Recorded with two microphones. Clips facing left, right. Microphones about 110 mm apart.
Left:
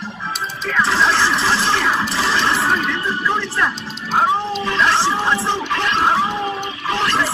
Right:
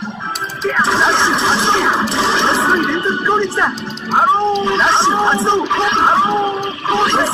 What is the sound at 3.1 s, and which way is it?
Speech, 20° right (ahead or behind).